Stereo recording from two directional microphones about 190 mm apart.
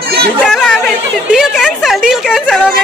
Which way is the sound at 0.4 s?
Centre (ahead or behind).